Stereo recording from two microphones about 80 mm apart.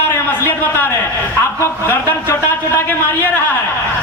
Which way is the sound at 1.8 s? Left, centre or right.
Left.